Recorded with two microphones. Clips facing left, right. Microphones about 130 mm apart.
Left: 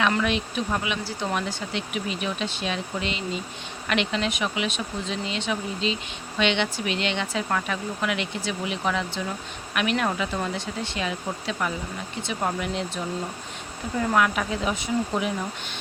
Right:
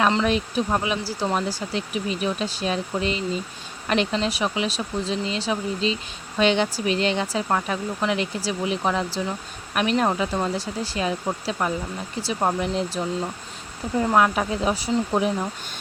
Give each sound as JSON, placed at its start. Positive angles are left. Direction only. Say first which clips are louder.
{"t": 0.3, "sound": "speech", "louder": "right 4 dB", "side_deg": -40}
{"t": 14.1, "sound": "speech", "louder": "right 3 dB", "side_deg": -30}